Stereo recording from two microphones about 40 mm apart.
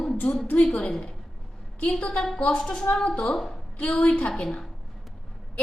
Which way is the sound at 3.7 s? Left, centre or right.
Left.